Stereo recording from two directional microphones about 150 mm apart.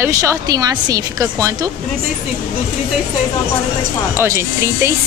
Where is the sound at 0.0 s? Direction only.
20° right (ahead or behind).